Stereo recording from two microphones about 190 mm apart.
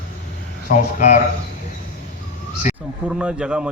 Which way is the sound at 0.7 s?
45° left (ahead or behind).